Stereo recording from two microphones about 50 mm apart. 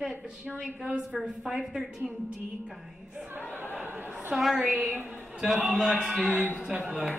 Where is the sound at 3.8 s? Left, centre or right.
Right.